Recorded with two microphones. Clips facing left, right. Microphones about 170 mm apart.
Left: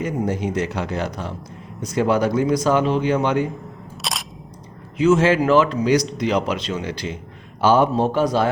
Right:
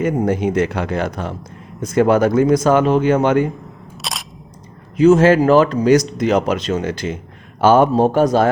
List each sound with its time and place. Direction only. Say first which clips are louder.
0.0 s speech: right 6 dB; 55° right (ahead or behind)
4.0 s single-lens reflex camera: even; centre (ahead or behind)
4.9 s speech: right 5 dB; 40° right (ahead or behind)